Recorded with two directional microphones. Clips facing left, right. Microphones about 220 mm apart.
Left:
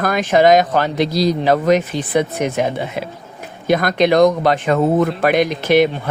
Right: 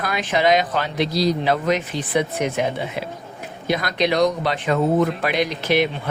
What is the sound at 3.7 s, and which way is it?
Speech, 50° left (ahead or behind).